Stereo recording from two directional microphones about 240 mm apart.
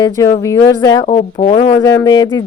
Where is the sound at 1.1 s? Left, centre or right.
Left.